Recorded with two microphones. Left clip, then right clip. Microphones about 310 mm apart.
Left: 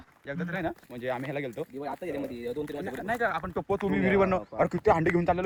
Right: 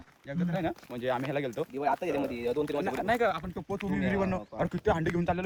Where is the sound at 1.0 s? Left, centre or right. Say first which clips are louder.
Right 2 dB; centre.